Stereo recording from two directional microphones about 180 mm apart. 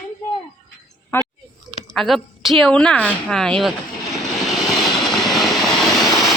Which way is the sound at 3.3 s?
5° left (ahead or behind).